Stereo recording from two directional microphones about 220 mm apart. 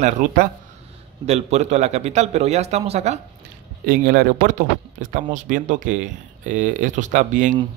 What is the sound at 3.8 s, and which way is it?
Speech, 40° right (ahead or behind).